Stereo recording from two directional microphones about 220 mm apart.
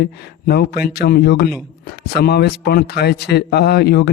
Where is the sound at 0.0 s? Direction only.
45° left (ahead or behind).